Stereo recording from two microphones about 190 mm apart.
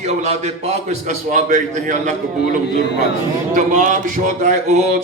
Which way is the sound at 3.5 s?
40° right (ahead or behind).